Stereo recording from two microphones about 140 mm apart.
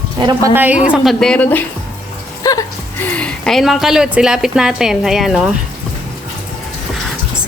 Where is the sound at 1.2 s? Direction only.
10° left (ahead or behind).